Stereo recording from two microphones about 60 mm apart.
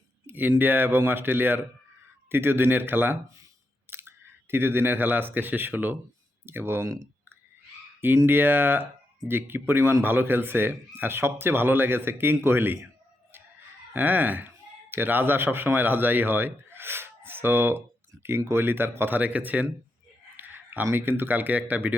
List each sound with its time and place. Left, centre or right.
0.3 s speech: right
8.0 s speech: right
13.9 s speech: right
20.3 s a sound: right
20.9 s speech: right